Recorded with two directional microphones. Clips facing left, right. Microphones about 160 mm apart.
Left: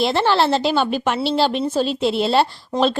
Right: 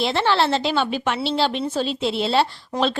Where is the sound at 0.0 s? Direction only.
40° left (ahead or behind).